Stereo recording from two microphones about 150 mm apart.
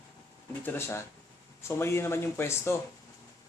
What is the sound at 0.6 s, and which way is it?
Speech, 15° left (ahead or behind).